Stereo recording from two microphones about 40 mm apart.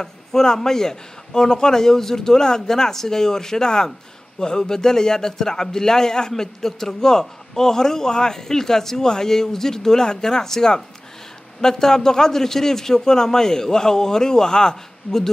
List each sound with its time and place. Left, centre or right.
0.0 s a man's voice: centre